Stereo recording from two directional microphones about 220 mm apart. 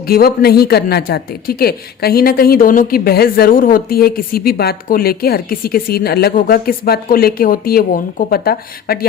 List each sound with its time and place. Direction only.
0.0 s speech: 45° left (ahead or behind)